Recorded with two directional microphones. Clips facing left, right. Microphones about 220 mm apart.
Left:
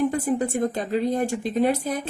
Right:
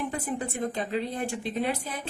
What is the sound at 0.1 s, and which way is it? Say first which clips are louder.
A woman's voice: left 8 dB; 40° left (ahead or behind).